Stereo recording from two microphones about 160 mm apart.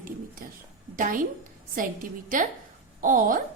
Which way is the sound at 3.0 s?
55° right (ahead or behind).